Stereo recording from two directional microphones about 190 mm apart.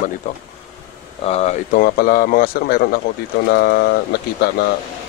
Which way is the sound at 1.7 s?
50° left (ahead or behind).